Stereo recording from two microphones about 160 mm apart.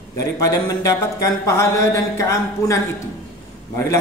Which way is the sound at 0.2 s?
20° left (ahead or behind).